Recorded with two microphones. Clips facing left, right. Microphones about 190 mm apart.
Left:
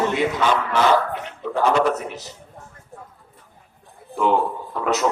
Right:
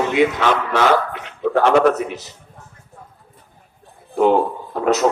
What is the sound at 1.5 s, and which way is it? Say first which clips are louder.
Speech: right 5 dB; 75° right (ahead or behind).